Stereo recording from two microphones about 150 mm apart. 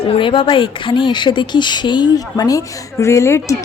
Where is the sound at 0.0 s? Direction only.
35° left (ahead or behind).